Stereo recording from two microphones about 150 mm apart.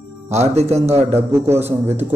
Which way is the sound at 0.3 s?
45° right (ahead or behind).